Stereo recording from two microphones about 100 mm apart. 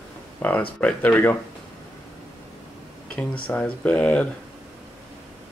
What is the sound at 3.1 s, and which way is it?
Speech, 15° left (ahead or behind).